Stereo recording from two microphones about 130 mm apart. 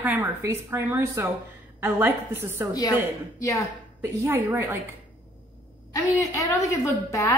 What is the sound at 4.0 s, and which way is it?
Speech, 20° right (ahead or behind).